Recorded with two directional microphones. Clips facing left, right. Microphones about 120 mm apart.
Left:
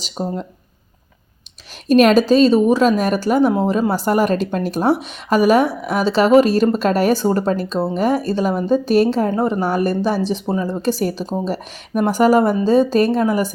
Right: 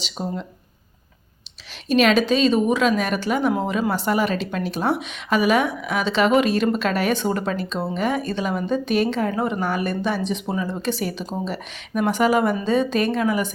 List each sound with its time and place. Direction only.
0.0 s speech: 45° left (ahead or behind)
1.9 s a woman's voice: 45° left (ahead or behind)